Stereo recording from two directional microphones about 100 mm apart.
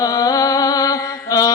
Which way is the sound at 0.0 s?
40° left (ahead or behind).